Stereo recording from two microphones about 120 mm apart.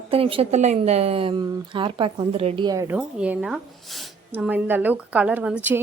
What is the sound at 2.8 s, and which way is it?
Speech, 10° right (ahead or behind).